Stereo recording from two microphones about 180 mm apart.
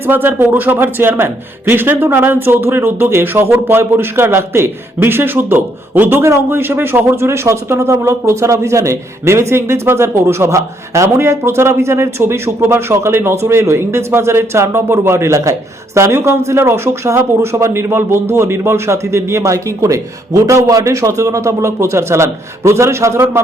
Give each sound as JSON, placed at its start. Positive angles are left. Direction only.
{"t": 0.1, "sound": "a man's voice", "side_deg": -10}